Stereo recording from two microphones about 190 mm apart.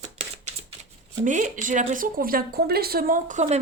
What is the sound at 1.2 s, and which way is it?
Speech, 40° right (ahead or behind).